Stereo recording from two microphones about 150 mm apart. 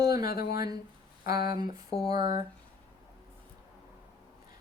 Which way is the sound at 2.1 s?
30° right (ahead or behind).